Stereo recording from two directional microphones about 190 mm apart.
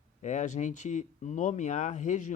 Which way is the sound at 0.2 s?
40° left (ahead or behind).